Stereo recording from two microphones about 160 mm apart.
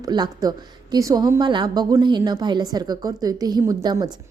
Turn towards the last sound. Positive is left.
turn(degrees=-20)  # may be behind; listen again after turning